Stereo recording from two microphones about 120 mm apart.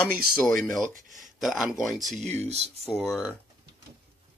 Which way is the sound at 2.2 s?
65° right (ahead or behind).